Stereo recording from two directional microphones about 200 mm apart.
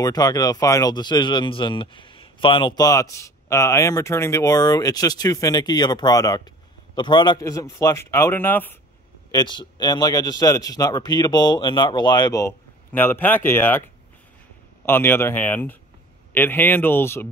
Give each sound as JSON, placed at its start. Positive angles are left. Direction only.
{"t": 0.0, "sound": "a man's voice", "side_deg": 20}
{"t": 9.3, "sound": "speech", "side_deg": 20}
{"t": 14.9, "sound": "a man's voice", "side_deg": 10}